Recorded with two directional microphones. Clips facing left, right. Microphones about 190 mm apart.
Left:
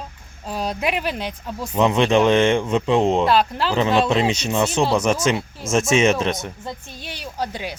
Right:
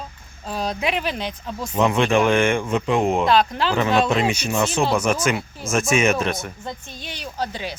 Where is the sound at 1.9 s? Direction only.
20° left (ahead or behind).